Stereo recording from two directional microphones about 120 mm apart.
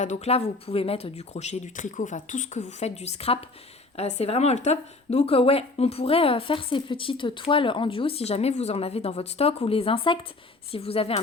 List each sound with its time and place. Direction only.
0.0 s a woman's voice: 70° left (ahead or behind)